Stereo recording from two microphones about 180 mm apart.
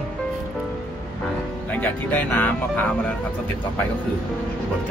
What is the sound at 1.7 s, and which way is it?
Speech, 10° left (ahead or behind).